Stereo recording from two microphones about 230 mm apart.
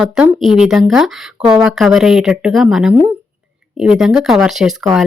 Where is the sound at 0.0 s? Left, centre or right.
Centre.